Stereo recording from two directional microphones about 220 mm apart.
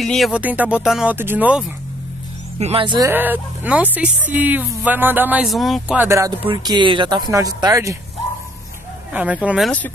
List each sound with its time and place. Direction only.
0.0 s speech: centre (ahead or behind)
2.6 s speech: 25° right (ahead or behind)
3.1 s speech: 10° right (ahead or behind)
9.1 s speech: 5° right (ahead or behind)
9.7 s speech: 5° left (ahead or behind)